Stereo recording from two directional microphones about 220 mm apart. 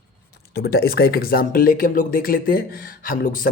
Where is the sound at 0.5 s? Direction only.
45° left (ahead or behind).